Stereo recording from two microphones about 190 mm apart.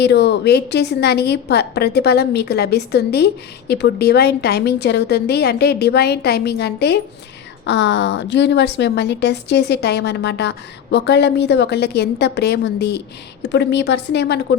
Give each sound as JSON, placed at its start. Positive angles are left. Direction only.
{"t": 0.0, "sound": "a woman's voice", "side_deg": 60}